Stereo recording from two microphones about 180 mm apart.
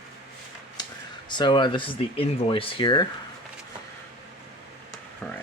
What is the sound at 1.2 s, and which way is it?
Speech, 25° left (ahead or behind).